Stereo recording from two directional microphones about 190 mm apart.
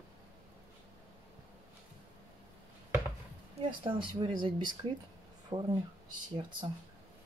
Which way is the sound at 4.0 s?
25° right (ahead or behind).